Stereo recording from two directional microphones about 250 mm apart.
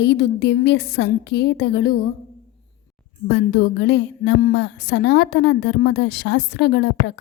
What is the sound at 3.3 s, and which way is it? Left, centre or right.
Speech, left.